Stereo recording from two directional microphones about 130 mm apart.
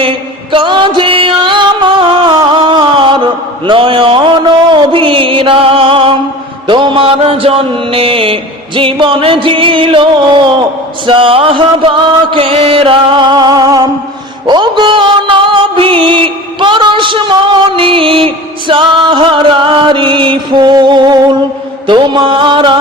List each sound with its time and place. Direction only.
0.5 s music: 40° right (ahead or behind)
3.7 s mantra: 40° right (ahead or behind)
11.0 s chant: 40° right (ahead or behind)
14.4 s music: 35° right (ahead or behind)